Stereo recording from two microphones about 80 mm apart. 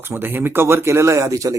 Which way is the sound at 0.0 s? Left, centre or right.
Right.